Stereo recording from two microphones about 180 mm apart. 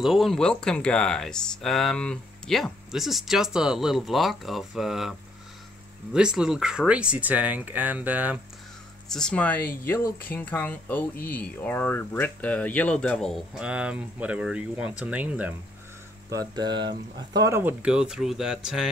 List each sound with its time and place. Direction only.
0.0 s speech: centre (ahead or behind)
6.1 s speech: 5° right (ahead or behind)
9.1 s speech: 5° left (ahead or behind)
16.3 s speech: 20° right (ahead or behind); by 18.9 s 5° right (ahead or behind)